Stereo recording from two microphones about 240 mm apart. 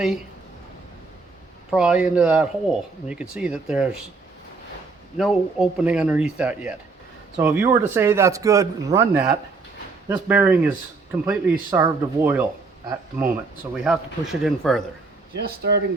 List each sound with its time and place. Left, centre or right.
1.7 s speech: centre
5.1 s speech: centre
15.3 s speech: right